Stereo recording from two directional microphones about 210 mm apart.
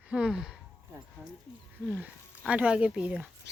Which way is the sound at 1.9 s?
5° right (ahead or behind).